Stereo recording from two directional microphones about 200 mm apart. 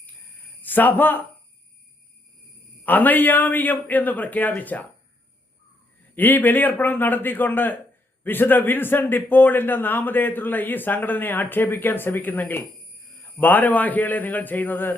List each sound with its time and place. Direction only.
0.6 s speech: 10° left (ahead or behind)
2.8 s a man's voice: 10° left (ahead or behind)
6.1 s a man's voice: 10° left (ahead or behind)